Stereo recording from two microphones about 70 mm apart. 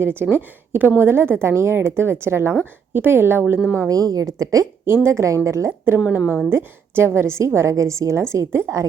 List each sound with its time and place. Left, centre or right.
0.0 s a woman's voice: right
3.8 s a woman's voice: right
6.1 s a woman's voice: centre
6.5 s a woman's voice: right